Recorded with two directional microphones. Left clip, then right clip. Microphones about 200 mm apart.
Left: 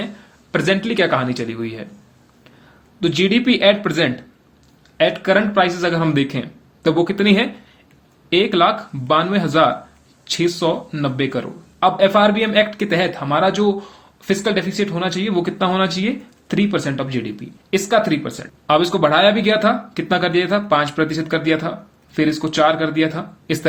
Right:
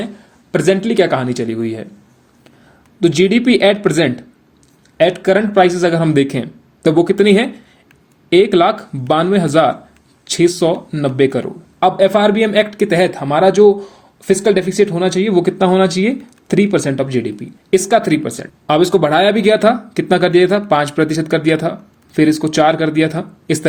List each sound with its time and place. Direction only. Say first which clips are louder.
0.0 s speech: right 3 dB; 35° right (ahead or behind)
3.0 s speech: right 5 dB; 40° right (ahead or behind)